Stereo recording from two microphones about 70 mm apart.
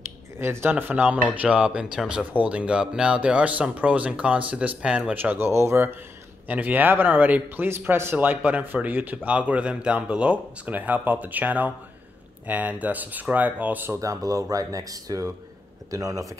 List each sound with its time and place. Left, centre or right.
0.4 s a man's voice: right; by 5.1 s centre
5.1 s a man's voice: right
5.5 s speech: right
6.4 s a man's voice: right
13.9 s speech: right